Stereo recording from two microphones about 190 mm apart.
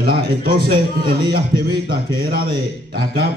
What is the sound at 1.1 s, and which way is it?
A man's voice, 55° right (ahead or behind).